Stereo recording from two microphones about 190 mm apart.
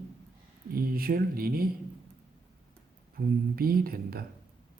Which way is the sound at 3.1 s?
50° right (ahead or behind).